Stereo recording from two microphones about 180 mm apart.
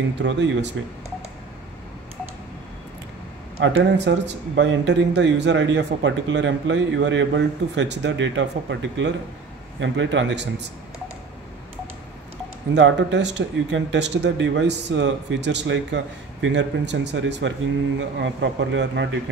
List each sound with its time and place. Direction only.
0.2 s speech: 80° right
3.5 s speech: 75° right (ahead or behind)
12.7 s speech: 75° right (ahead or behind)